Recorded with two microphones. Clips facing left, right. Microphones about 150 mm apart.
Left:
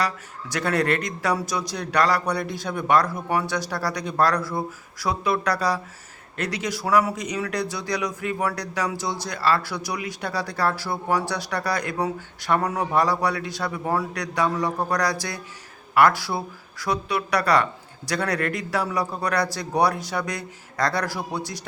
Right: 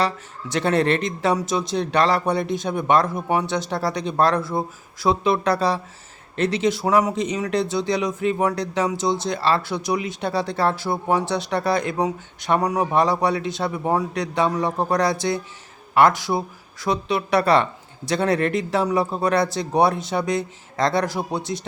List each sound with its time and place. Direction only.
0.0 s speech: 25° right (ahead or behind)